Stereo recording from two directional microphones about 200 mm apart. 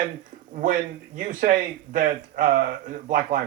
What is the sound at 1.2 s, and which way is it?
Speech, 40° right (ahead or behind).